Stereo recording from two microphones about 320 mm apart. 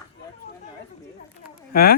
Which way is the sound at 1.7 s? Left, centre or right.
Left.